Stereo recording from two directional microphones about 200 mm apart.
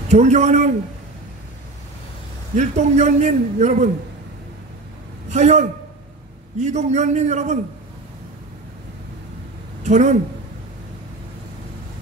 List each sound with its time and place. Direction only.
0.1 s a man's voice: 35° right (ahead or behind)
2.5 s a man's voice: 35° right (ahead or behind)
5.3 s a man's voice: 35° right (ahead or behind)
9.8 s a man's voice: 35° right (ahead or behind)